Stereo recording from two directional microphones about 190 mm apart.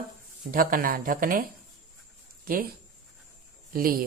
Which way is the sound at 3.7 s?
50° right (ahead or behind).